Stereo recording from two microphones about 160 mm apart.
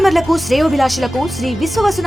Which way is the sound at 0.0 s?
Centre (ahead or behind).